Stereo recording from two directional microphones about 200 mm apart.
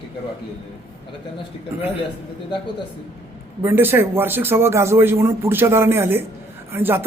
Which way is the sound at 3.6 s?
10° right (ahead or behind).